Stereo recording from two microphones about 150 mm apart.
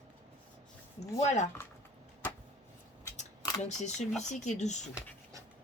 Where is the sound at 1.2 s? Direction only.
50° left (ahead or behind).